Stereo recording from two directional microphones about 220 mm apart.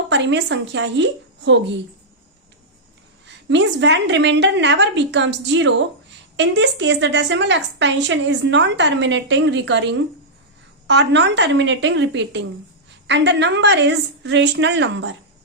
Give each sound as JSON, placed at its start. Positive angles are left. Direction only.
{"t": 0.1, "sound": "a woman's voice", "side_deg": -55}
{"t": 3.2, "sound": "a woman's voice", "side_deg": -55}